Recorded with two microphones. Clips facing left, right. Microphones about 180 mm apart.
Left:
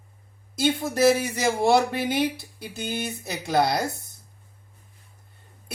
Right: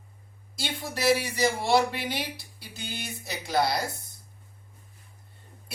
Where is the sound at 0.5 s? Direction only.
50° left (ahead or behind).